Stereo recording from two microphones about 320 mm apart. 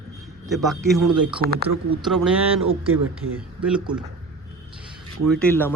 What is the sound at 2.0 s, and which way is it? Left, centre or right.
Speech, centre.